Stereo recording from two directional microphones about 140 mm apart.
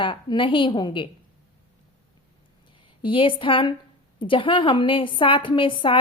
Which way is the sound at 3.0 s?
35° left (ahead or behind).